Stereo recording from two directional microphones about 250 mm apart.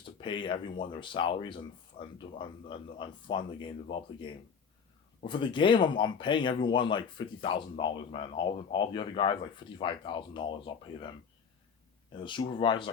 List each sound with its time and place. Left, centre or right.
0.0 s speech: centre
12.2 s speech: centre